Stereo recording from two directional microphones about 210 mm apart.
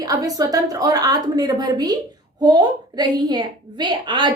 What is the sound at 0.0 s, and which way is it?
A woman's voice, 15° right (ahead or behind).